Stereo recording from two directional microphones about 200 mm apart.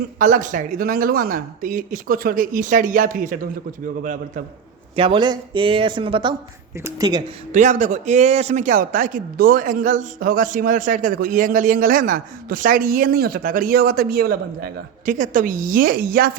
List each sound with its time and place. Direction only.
0.2 s speech: 45° right (ahead or behind)
4.9 s speech: 25° right (ahead or behind)
6.7 s speech: 15° right (ahead or behind)
7.5 s speech: 40° right (ahead or behind)